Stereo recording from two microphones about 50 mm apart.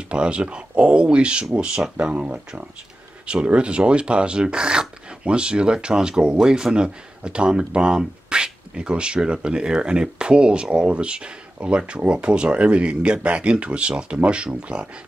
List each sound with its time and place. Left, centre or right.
0.1 s speech: right